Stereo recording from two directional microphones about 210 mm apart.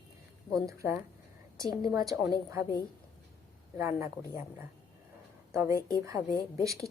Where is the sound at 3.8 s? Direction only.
15° right (ahead or behind).